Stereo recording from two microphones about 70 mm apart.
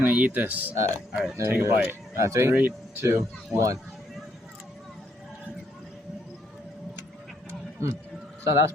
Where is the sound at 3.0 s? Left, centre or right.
Right.